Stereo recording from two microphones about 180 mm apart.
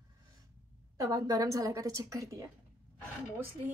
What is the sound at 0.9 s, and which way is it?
A woman's voice, 20° right (ahead or behind).